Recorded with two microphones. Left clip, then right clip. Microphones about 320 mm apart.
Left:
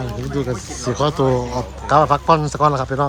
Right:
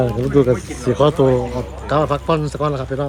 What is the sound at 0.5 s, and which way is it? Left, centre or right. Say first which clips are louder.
Speech: right 5 dB; centre.